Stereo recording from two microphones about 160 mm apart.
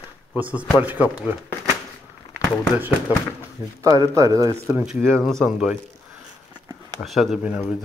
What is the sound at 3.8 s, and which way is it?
Speech, 20° right (ahead or behind).